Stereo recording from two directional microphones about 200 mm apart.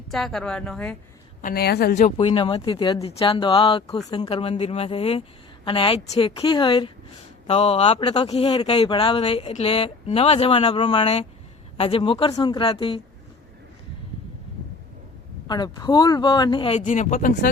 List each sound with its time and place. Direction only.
0.1 s a woman's voice: centre (ahead or behind)
1.4 s speech: 45° left (ahead or behind)
2.1 s speech: 25° left (ahead or behind)
15.4 s speech: 20° left (ahead or behind); by 17.5 s 45° left (ahead or behind)